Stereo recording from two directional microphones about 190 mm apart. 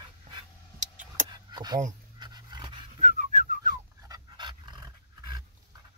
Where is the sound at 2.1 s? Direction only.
20° right (ahead or behind).